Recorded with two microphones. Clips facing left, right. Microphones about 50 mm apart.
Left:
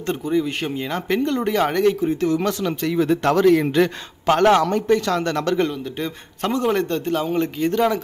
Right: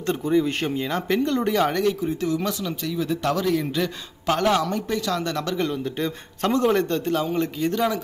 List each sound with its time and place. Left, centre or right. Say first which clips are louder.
0.0 s speech: even; left
5.9 s speech: even; left